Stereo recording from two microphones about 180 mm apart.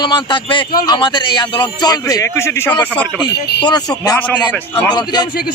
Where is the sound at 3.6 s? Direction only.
20° left (ahead or behind).